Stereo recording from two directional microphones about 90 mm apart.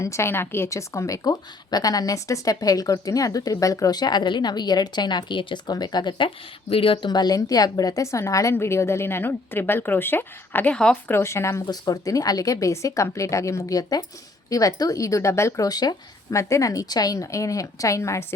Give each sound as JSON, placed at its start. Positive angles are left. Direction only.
{"t": 0.0, "sound": "a woman's voice", "side_deg": 30}
{"t": 5.6, "sound": "speech", "side_deg": 50}
{"t": 7.1, "sound": "a woman's voice", "side_deg": 50}
{"t": 11.7, "sound": "a woman's voice", "side_deg": 40}
{"t": 16.3, "sound": "a woman's voice", "side_deg": 35}